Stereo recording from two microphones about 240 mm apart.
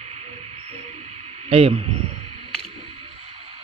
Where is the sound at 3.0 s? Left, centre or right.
Right.